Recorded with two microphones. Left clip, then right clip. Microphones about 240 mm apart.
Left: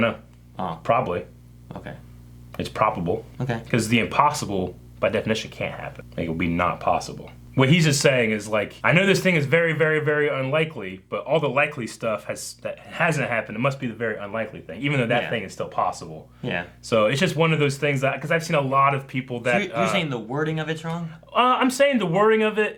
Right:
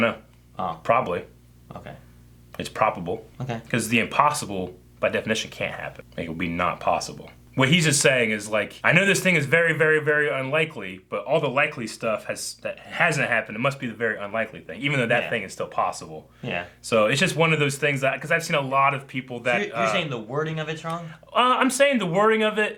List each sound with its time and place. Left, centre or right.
0.9 s speech: left
2.6 s speech: left
3.3 s speech: right
3.7 s speech: left
16.4 s speech: right
16.9 s speech: left
19.8 s speech: right
21.3 s a man's voice: left